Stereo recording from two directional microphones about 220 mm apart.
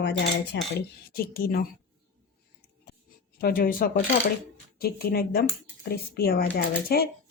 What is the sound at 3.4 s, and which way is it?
A woman's voice, 45° left (ahead or behind).